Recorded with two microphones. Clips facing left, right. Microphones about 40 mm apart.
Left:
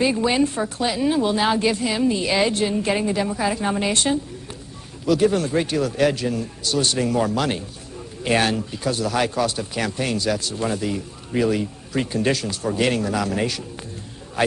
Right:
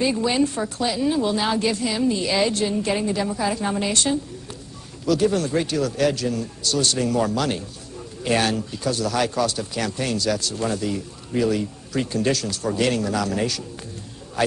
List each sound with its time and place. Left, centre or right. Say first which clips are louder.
0.0 s speech: left 1 dB; left